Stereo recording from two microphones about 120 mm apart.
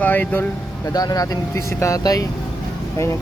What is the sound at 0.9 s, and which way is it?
Speech, 30° left (ahead or behind).